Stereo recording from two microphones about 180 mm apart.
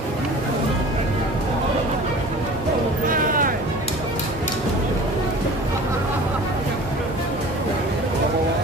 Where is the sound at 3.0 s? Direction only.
50° right (ahead or behind).